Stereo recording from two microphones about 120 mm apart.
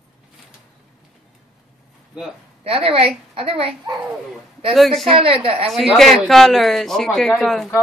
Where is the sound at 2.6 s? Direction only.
50° right (ahead or behind).